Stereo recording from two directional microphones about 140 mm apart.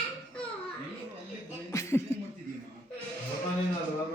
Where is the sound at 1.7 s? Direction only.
20° left (ahead or behind).